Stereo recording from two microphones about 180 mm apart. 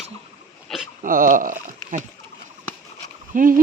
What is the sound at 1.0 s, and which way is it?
Speech, 50° right (ahead or behind).